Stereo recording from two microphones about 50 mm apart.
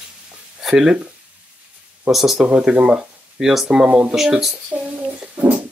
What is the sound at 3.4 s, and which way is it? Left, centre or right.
Speech, centre.